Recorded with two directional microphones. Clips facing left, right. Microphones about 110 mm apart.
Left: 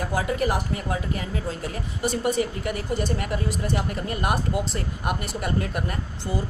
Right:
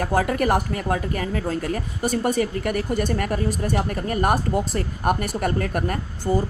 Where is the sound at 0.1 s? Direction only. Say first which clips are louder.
Right 5 dB; 55° right (ahead or behind).